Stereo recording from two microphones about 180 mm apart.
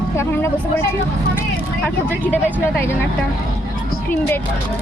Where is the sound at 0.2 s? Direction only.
10° left (ahead or behind).